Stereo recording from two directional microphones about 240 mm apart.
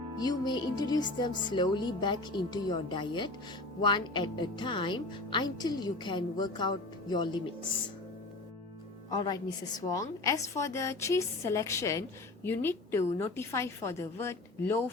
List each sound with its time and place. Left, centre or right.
0.2 s a woman's voice: centre
9.0 s a woman's voice: centre